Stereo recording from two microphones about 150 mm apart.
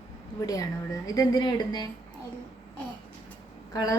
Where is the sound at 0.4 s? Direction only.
25° left (ahead or behind).